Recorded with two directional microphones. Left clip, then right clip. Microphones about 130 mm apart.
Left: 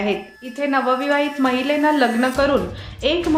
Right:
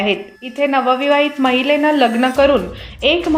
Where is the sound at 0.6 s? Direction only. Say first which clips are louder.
Right 4 dB; 10° right (ahead or behind).